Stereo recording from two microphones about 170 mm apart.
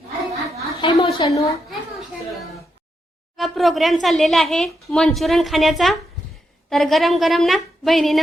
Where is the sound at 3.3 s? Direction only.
Centre (ahead or behind).